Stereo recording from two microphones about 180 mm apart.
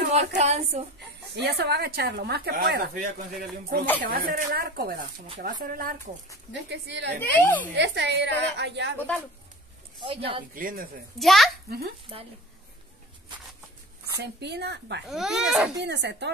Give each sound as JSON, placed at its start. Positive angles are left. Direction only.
{"t": 0.1, "sound": "a woman's voice", "side_deg": -35}
{"t": 1.2, "sound": "speech", "side_deg": -65}
{"t": 6.7, "sound": "a woman's voice", "side_deg": -75}
{"t": 7.2, "sound": "a woman's voice", "side_deg": 10}
{"t": 7.7, "sound": "a woman's voice", "side_deg": -75}
{"t": 8.9, "sound": "a woman's voice", "side_deg": 10}
{"t": 9.9, "sound": "speech", "side_deg": -30}
{"t": 10.5, "sound": "speech", "side_deg": -55}
{"t": 11.1, "sound": "speech", "side_deg": 0}
{"t": 12.1, "sound": "a woman's voice", "side_deg": -30}
{"t": 14.2, "sound": "a woman's voice", "side_deg": -70}
{"t": 15.0, "sound": "speech", "side_deg": 0}
{"t": 15.8, "sound": "a woman's voice", "side_deg": -70}